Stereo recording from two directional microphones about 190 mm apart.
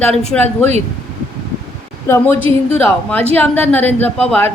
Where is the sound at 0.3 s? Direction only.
10° left (ahead or behind).